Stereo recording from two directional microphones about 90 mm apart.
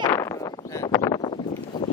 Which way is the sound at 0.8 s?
40° left (ahead or behind).